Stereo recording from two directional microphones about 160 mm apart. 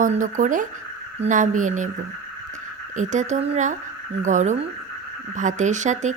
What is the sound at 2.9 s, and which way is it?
Speech, 50° right (ahead or behind).